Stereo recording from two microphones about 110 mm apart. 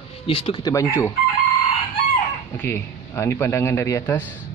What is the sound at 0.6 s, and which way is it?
Speech, 30° left (ahead or behind).